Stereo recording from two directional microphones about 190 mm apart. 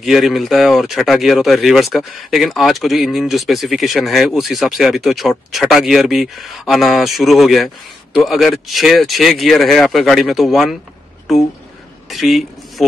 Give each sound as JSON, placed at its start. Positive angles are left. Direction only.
{"t": 0.0, "sound": "speech", "side_deg": 0}